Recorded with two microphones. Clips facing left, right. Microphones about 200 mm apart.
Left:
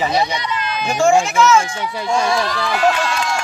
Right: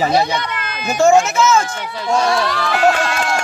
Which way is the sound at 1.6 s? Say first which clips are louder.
Left 1 dB; 10° left (ahead or behind).